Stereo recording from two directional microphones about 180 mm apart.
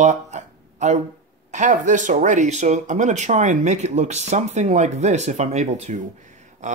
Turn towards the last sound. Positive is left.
turn(degrees=-45)  # may be behind; listen again after turning